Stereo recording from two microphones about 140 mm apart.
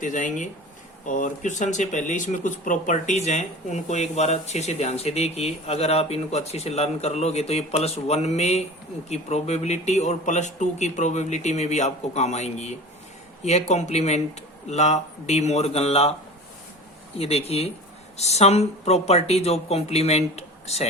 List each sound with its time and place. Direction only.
0.0 s speech: 65° left (ahead or behind); by 16.1 s 45° left (ahead or behind)
17.2 s speech: 45° left (ahead or behind)